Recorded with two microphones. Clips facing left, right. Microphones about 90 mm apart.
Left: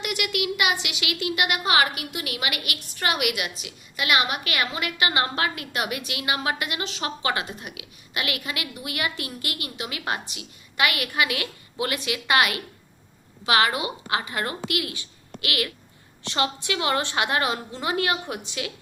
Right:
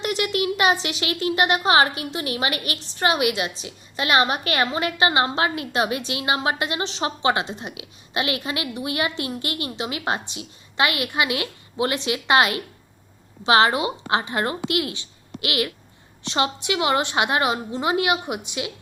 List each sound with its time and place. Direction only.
0.0 s a woman's voice: 30° right (ahead or behind)